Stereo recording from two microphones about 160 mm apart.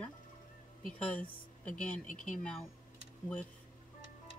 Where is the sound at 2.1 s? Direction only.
50° left (ahead or behind).